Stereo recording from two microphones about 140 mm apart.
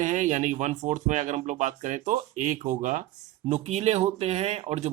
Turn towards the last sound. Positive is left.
turn(degrees=-50)  # may be behind; listen again after turning